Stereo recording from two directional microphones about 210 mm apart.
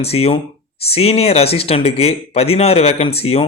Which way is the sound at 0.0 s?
30° left (ahead or behind).